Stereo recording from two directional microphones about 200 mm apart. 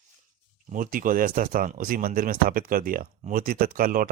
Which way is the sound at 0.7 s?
45° right (ahead or behind).